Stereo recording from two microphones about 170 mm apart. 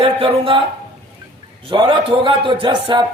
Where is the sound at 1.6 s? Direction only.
30° right (ahead or behind).